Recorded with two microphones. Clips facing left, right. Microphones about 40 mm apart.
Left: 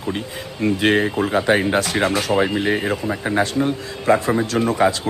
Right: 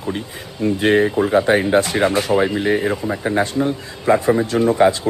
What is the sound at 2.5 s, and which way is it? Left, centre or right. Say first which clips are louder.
Speech: right 2 dB; centre.